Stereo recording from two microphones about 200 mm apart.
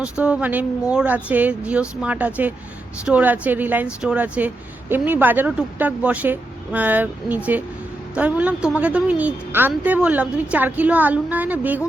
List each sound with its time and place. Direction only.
0.0 s speech: 5° right (ahead or behind)